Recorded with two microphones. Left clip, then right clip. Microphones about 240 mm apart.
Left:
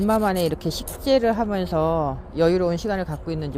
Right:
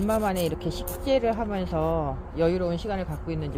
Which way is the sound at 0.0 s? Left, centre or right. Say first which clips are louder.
Left 4 dB; left.